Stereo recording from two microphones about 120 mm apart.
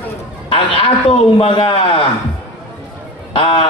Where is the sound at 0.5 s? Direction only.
50° left (ahead or behind).